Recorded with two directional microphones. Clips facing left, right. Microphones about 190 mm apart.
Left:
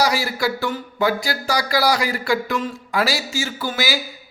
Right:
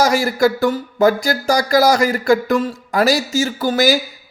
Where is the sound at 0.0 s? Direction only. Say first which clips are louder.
Right 6 dB; 45° right (ahead or behind).